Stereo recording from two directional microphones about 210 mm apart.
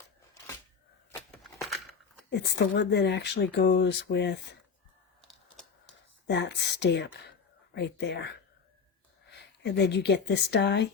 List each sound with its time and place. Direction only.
2.3 s speech: 55° left (ahead or behind)
6.2 s speech: 55° left (ahead or behind)
9.3 s speech: 55° left (ahead or behind)